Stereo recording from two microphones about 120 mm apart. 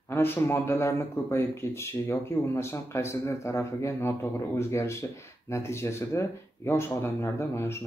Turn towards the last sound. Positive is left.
turn(degrees=20)  # may be behind; listen again after turning